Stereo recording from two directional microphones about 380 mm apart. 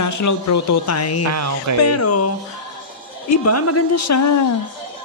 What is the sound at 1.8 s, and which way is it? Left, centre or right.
Speech, left.